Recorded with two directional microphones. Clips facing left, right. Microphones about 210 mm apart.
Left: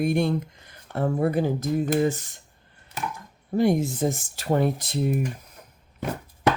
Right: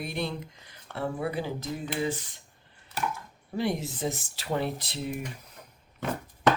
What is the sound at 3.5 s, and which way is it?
Cutlery, 45° left (ahead or behind).